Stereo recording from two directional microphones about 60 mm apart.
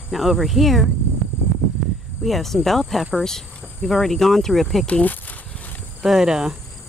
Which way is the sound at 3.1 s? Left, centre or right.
Centre.